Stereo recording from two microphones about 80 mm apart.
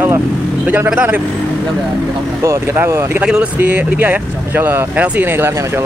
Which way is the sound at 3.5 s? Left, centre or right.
Right.